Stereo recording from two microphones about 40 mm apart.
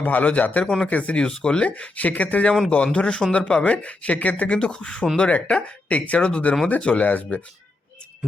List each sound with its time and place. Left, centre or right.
0.0 s speech: left
0.6 s speech: centre
0.9 s speech: left
1.7 s speech: left
2.6 s speech: left